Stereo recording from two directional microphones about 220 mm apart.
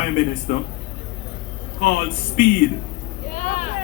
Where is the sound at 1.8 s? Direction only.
40° left (ahead or behind).